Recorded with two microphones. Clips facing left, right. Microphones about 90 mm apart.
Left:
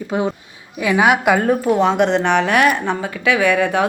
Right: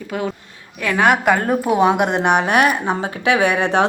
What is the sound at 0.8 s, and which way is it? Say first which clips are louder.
Speech: left 1 dB; 10° left (ahead or behind).